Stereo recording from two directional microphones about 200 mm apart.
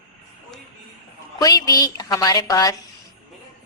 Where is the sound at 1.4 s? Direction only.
20° left (ahead or behind).